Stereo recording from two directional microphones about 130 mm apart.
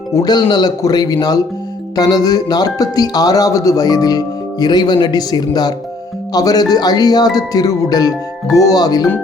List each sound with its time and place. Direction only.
0.1 s speech: 30° left (ahead or behind)